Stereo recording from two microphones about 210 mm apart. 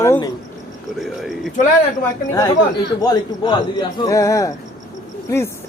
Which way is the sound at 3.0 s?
20° left (ahead or behind).